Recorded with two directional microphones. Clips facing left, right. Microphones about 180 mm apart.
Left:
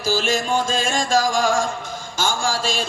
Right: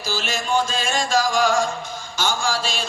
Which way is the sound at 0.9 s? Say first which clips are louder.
Even; 45° left (ahead or behind).